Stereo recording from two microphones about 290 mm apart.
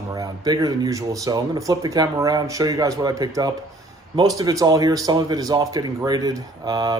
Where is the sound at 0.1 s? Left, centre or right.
Centre.